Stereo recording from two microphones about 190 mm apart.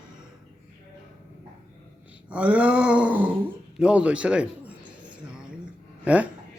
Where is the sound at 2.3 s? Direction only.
5° right (ahead or behind).